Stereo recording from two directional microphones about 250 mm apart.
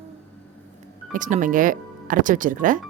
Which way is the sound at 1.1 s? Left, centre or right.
Right.